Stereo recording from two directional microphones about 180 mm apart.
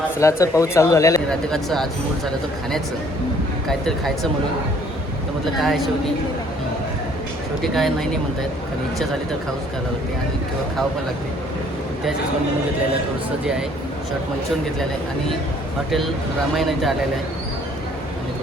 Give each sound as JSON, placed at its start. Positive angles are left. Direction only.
{"t": 0.2, "sound": "speech", "side_deg": 15}
{"t": 1.3, "sound": "speech", "side_deg": 5}
{"t": 3.7, "sound": "speech", "side_deg": 0}
{"t": 7.6, "sound": "speech", "side_deg": 0}
{"t": 16.6, "sound": "speech", "side_deg": 0}